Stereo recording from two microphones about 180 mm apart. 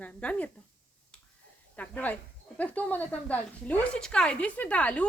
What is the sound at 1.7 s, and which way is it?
Speech, 10° left (ahead or behind).